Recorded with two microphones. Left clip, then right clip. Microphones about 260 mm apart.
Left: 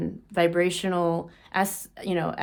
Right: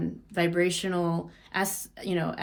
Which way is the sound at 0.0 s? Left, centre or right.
Left.